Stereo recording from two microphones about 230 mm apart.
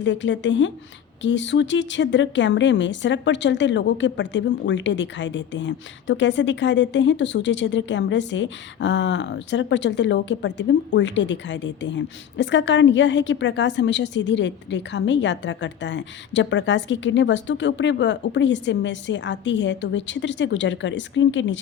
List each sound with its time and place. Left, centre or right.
0.0 s speech: left